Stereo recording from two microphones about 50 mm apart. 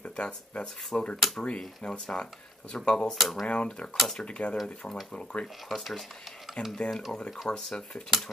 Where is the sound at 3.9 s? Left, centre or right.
Centre.